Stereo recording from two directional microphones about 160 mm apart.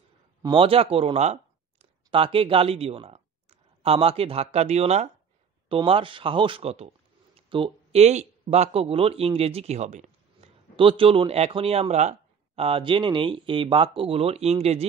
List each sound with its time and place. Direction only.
0.4 s a man's voice: 35° right (ahead or behind)
10.8 s a man's voice: 35° right (ahead or behind)